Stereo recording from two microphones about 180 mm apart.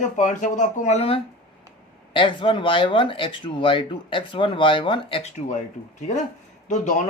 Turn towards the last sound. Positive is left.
turn(degrees=45)  # may be behind; listen again after turning